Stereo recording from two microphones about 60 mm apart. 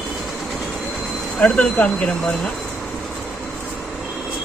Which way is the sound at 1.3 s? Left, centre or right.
Left.